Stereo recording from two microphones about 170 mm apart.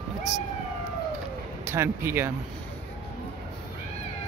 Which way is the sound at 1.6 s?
15° right (ahead or behind).